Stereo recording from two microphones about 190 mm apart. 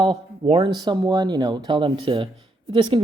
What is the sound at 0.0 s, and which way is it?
Speech, 25° right (ahead or behind).